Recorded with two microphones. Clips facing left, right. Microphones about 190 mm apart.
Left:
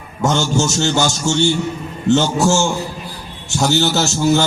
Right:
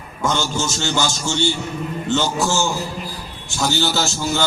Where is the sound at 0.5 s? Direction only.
45° left (ahead or behind).